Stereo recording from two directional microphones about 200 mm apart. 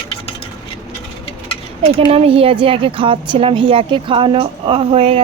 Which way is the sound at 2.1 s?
30° right (ahead or behind).